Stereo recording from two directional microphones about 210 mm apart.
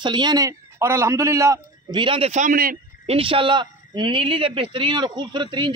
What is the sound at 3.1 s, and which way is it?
A man's voice, 25° right (ahead or behind).